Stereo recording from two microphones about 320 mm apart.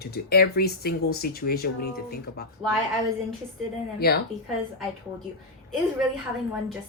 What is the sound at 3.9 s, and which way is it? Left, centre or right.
Speech, left.